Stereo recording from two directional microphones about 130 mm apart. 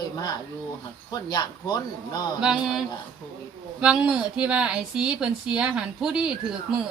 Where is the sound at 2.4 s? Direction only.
5° right (ahead or behind).